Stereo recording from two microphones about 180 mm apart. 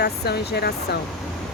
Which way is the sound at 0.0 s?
65° left (ahead or behind).